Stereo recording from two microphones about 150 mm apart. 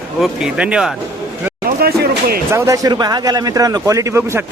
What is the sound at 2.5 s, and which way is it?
Speech, 20° right (ahead or behind).